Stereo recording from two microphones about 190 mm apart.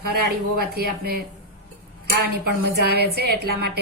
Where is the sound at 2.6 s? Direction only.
60° right (ahead or behind).